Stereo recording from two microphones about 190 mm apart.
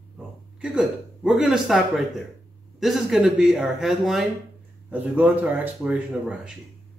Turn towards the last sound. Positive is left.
turn(degrees=-5)  # may be behind; listen again after turning